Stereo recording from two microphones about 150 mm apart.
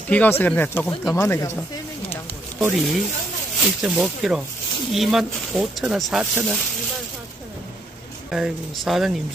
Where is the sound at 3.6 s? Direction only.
5° right (ahead or behind).